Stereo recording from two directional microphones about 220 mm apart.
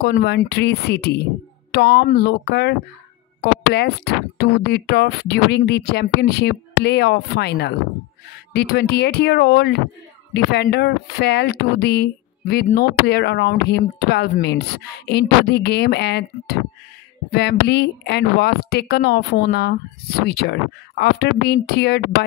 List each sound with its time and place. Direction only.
0.0 s speech: 45° left (ahead or behind)